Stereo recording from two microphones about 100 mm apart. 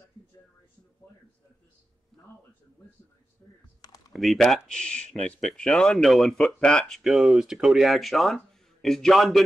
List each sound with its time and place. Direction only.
3.4 s speech: 30° left (ahead or behind)
4.1 s speech: centre (ahead or behind)
7.0 s speech: 5° right (ahead or behind)